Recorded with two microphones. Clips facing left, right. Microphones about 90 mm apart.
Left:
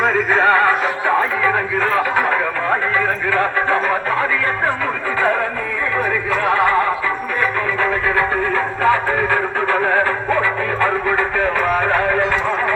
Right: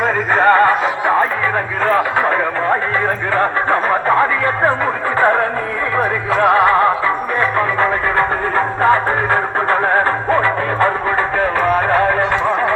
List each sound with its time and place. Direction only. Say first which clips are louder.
0.3 s music: right 4 dB; 40° right (ahead or behind)
1.9 s radio: right 4 dB; 40° right (ahead or behind)
3.3 s music: right 2 dB; 40° right (ahead or behind)
6.0 s music: right 5 dB; 50° right (ahead or behind)
8.5 s music: right 4 dB; 40° right (ahead or behind)
11.9 s music: right 3 dB; 35° right (ahead or behind)